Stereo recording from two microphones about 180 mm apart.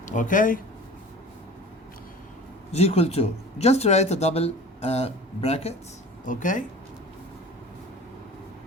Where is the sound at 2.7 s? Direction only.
35° left (ahead or behind).